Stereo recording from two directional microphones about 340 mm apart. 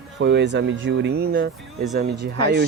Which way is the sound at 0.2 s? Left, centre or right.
Right.